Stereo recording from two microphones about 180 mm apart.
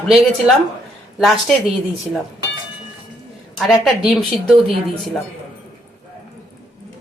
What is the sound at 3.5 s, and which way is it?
A woman's voice, centre (ahead or behind).